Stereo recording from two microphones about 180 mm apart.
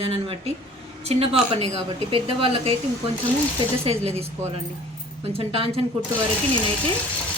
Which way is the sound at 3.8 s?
35° right (ahead or behind).